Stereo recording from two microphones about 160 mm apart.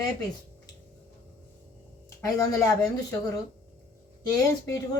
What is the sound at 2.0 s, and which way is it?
A woman's voice, 20° left (ahead or behind).